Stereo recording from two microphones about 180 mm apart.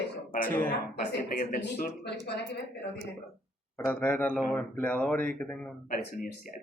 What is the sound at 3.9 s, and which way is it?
Speech, 10° left (ahead or behind).